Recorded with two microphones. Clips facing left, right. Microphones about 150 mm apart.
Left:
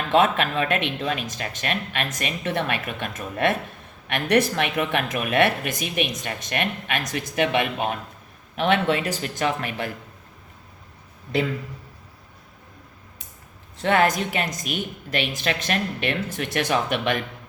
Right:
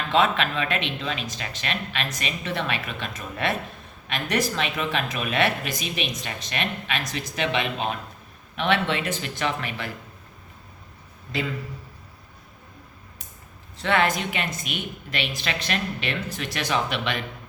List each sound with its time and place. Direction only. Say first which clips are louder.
0.1 s speech: left 2 dB; 50° left (ahead or behind)
13.8 s speech: left 3 dB; 45° left (ahead or behind)